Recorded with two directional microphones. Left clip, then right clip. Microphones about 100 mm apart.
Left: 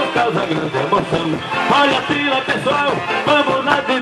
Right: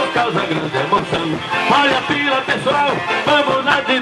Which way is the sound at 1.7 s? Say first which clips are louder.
Even; 20° right (ahead or behind).